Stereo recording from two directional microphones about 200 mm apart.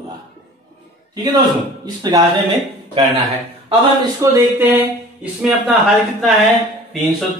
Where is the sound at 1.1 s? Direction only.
20° right (ahead or behind).